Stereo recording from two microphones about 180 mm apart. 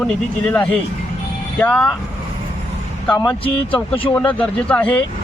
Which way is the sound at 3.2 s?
30° left (ahead or behind).